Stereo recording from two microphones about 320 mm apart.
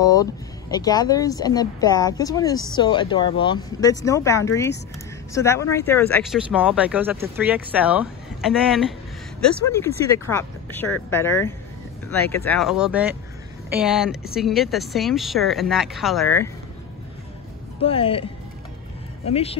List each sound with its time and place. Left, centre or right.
0.0 s speech: centre
17.8 s speech: centre
19.2 s speech: centre